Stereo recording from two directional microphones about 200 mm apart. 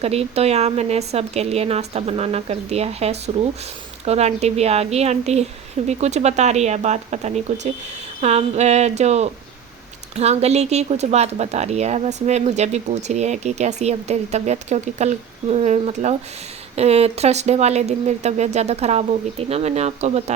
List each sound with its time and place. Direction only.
0.0 s speech: 30° right (ahead or behind)